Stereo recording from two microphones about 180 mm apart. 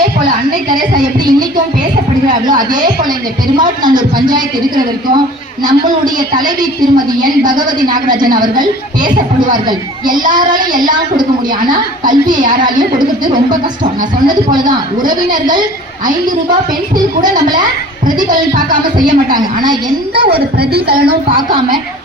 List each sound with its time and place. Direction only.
0.7 s a woman's voice: 25° right (ahead or behind)
5.6 s a woman's voice: 25° right (ahead or behind)
14.7 s a woman's voice: 25° right (ahead or behind)
17.2 s a woman's voice: 25° right (ahead or behind)
18.3 s speech: 50° right (ahead or behind)
18.9 s a woman's voice: 25° right (ahead or behind)
20.6 s a woman's voice: 60° right (ahead or behind)
21.3 s a woman's voice: 25° right (ahead or behind)